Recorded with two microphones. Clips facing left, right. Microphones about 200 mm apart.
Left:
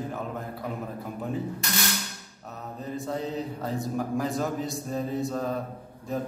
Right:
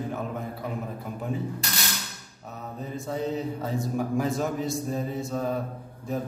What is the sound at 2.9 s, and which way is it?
A man's voice, centre (ahead or behind).